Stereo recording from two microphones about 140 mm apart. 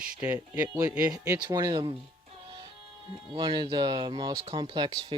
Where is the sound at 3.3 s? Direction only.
30° right (ahead or behind).